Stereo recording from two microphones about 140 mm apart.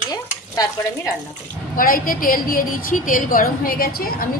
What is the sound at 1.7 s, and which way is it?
A woman's voice, 90° left.